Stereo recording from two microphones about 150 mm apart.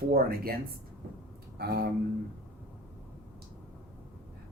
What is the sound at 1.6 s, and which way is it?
Speech, 90° right.